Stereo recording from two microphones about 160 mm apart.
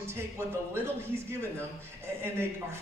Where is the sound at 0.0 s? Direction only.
15° right (ahead or behind).